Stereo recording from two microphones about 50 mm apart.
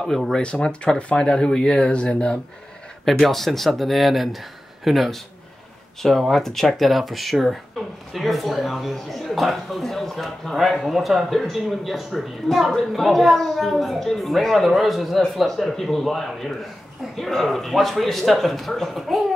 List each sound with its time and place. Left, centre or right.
0.0 s speech: centre
0.4 s speech: left
3.1 s speech: centre